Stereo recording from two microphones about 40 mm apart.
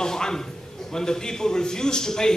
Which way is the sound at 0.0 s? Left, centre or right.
Centre.